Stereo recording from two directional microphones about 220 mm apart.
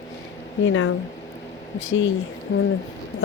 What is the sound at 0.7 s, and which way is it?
Speech, 60° left (ahead or behind).